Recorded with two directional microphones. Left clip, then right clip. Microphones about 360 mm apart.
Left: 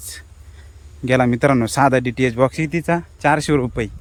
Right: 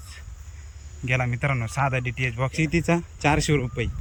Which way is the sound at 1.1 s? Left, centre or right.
Centre.